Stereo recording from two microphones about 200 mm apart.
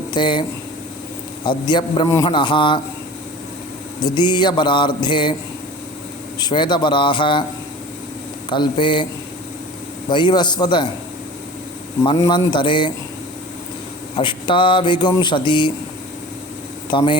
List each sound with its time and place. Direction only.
0.1 s speech: 25° left (ahead or behind)
1.5 s a man's voice: 20° left (ahead or behind)
4.0 s a man's voice: 20° left (ahead or behind)
6.4 s a man's voice: 25° left (ahead or behind)
8.4 s a man's voice: 25° left (ahead or behind)
10.1 s a man's voice: 25° left (ahead or behind)
12.0 s a man's voice: 20° left (ahead or behind)
14.2 s a man's voice: 25° left (ahead or behind)
16.9 s a man's voice: 25° left (ahead or behind)